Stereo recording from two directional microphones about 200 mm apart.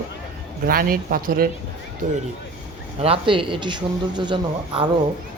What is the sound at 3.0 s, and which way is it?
Speech, 25° right (ahead or behind).